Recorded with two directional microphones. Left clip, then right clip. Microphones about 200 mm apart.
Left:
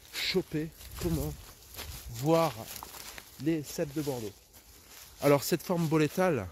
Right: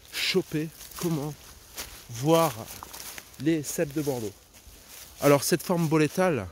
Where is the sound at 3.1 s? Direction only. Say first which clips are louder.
Right 4 dB; 15° right (ahead or behind).